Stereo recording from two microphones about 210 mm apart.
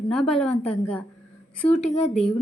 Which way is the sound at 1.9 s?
30° left (ahead or behind).